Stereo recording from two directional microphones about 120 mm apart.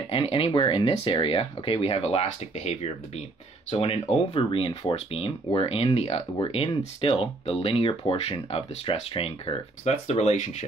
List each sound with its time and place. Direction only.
0.1 s speech: 50° left (ahead or behind); by 10.5 s 65° left (ahead or behind)